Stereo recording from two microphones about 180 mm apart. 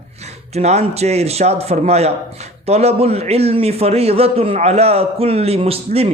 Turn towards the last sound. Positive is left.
turn(degrees=-35)  # may be behind; listen again after turning